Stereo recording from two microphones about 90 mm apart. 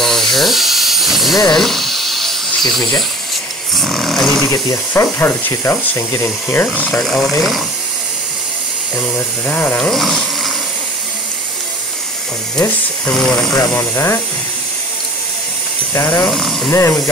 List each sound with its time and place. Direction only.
0.0 s dental drill: 5° left (ahead or behind)
1.5 s electric toothbrush: centre (ahead or behind)
3.7 s snoring: 5° left (ahead or behind)
4.5 s speech: 35° left (ahead or behind)
6.2 s speech: 20° left (ahead or behind)
7.1 s snoring: 5° left (ahead or behind)
9.1 s speech: 20° left (ahead or behind)
9.8 s speech: 5° left (ahead or behind)
13.3 s speech: 10° left (ahead or behind)
13.6 s speech: 30° left (ahead or behind)
15.9 s speech: 30° left (ahead or behind)
16.3 s snoring: 5° left (ahead or behind)
16.7 s speech: 35° left (ahead or behind)